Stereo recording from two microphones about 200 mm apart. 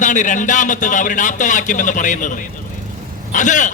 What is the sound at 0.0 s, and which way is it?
A man's voice, 40° left (ahead or behind).